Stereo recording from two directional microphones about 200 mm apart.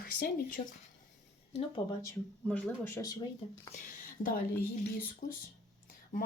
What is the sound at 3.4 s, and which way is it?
Speech, 30° left (ahead or behind).